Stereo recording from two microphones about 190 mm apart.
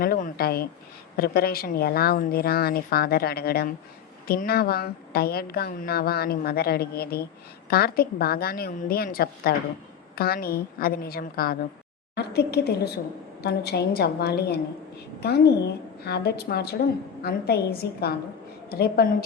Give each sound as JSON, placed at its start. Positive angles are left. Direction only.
{"t": 0.0, "sound": "a woman's voice", "side_deg": 50}